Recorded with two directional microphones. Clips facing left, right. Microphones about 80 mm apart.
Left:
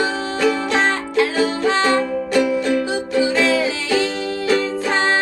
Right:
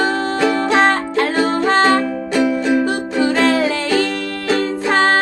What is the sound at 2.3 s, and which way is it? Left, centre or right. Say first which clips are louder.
Music: right 2 dB; centre.